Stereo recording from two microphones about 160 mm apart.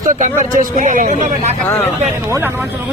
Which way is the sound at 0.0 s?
55° right (ahead or behind).